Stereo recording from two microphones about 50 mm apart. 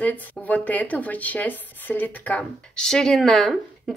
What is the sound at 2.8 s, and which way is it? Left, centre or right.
Speech, centre.